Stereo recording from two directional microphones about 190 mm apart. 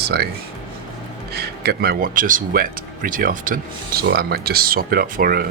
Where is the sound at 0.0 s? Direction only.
55° right (ahead or behind).